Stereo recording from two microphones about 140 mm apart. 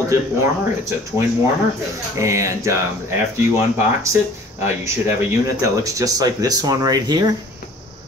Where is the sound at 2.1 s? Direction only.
20° right (ahead or behind).